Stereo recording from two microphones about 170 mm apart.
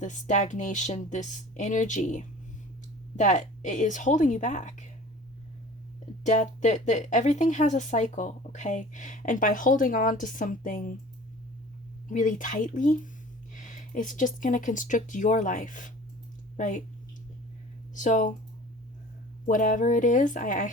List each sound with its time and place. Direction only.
0.0 s a woman's voice: 45° left (ahead or behind)
6.2 s a woman's voice: 45° left (ahead or behind)
12.0 s a woman's voice: 50° left (ahead or behind)
17.9 s speech: 50° left (ahead or behind)
19.5 s a woman's voice: 50° left (ahead or behind)